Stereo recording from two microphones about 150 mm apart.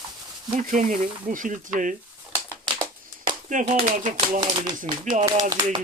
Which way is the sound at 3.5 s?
60° right (ahead or behind).